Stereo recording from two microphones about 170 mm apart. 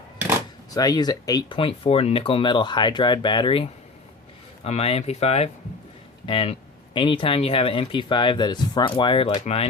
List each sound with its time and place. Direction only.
0.7 s speech: 20° left (ahead or behind); by 9.6 s 40° left (ahead or behind)